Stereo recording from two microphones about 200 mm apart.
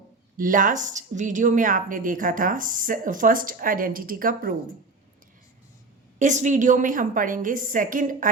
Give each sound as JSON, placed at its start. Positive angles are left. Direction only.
{"t": 0.3, "sound": "a woman's voice", "side_deg": -45}
{"t": 6.1, "sound": "a woman's voice", "side_deg": -40}